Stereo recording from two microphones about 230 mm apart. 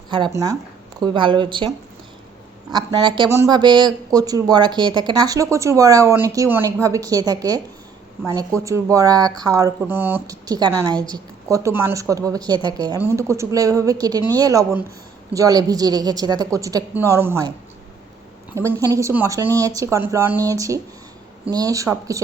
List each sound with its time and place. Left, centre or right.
0.1 s speech: centre
2.7 s speech: centre
18.5 s speech: centre